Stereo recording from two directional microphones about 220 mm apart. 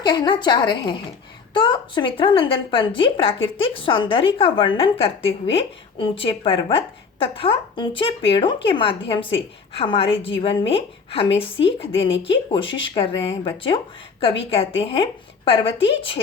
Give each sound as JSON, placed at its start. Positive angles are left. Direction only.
{"t": 0.0, "sound": "a woman's voice", "side_deg": 20}
{"t": 14.5, "sound": "a woman's voice", "side_deg": 25}